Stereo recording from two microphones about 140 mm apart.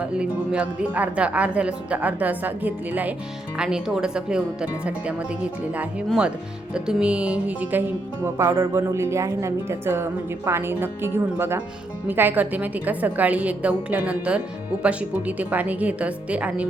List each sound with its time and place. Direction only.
0.0 s a woman's voice: 10° right (ahead or behind)
8.4 s a woman's voice: 25° right (ahead or behind)